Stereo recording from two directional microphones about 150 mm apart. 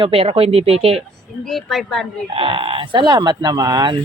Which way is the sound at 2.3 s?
35° right (ahead or behind).